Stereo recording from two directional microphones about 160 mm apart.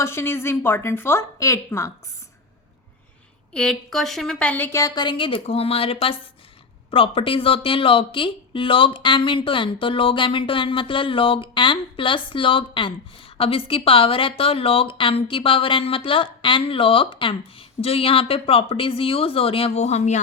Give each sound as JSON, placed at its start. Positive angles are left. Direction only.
{"t": 0.0, "sound": "a woman's voice", "side_deg": 15}
{"t": 3.5, "sound": "a woman's voice", "side_deg": 5}